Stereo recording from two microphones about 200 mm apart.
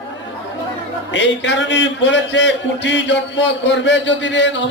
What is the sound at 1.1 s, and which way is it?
A man's voice, 65° left (ahead or behind).